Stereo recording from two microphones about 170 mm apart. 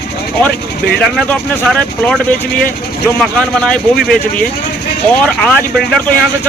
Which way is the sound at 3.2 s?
5° left (ahead or behind).